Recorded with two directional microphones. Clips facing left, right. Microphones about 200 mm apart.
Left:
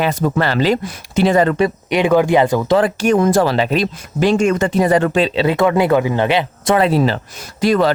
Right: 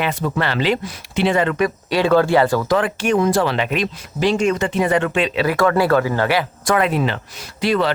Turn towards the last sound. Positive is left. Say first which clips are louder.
# left 4 dB
turn(degrees=40)  # may be behind; listen again after turning